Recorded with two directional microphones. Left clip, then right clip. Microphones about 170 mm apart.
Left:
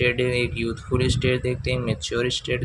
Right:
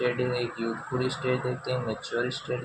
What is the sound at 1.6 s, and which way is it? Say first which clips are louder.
Speech: left 4 dB; 45° left (ahead or behind).